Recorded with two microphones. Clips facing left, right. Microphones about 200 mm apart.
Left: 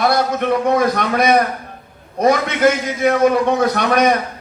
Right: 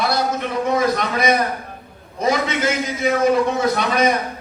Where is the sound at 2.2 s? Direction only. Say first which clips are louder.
Left 5 dB; 55° left (ahead or behind).